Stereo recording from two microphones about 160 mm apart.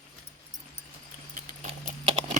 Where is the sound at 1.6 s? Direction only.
45° right (ahead or behind).